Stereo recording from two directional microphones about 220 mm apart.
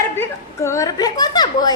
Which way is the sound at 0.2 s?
10° left (ahead or behind).